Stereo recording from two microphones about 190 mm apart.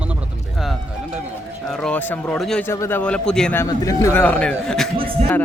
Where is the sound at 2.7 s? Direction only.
15° left (ahead or behind).